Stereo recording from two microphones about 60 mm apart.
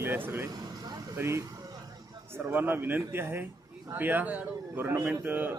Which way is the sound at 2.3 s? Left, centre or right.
Right.